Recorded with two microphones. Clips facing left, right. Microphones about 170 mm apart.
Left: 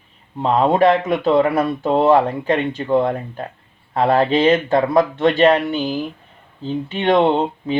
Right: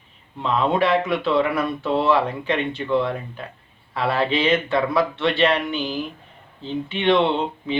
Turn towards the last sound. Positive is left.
turn(degrees=45)  # may be behind; listen again after turning